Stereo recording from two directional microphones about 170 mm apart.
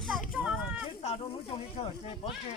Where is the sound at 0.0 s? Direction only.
Centre (ahead or behind).